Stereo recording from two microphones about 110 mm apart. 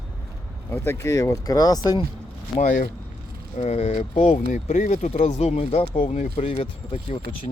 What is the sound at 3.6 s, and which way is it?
Speech, 75° left (ahead or behind).